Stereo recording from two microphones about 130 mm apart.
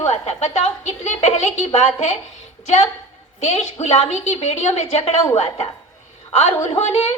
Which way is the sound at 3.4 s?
55° left (ahead or behind).